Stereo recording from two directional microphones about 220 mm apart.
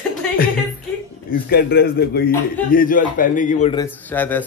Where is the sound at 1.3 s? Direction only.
45° left (ahead or behind).